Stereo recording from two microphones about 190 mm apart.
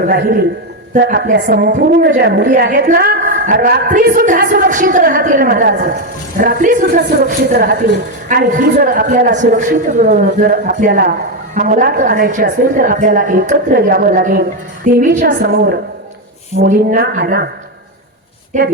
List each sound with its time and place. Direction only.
0.0 s a woman's voice: 55° right (ahead or behind)